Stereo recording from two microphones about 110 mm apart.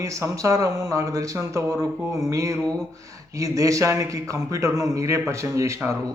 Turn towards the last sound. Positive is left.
turn(degrees=-25)  # may be behind; listen again after turning